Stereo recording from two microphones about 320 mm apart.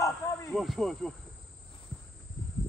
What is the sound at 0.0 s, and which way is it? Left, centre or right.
Wild animals, centre.